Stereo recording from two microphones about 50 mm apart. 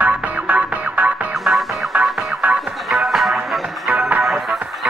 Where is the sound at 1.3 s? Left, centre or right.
Centre.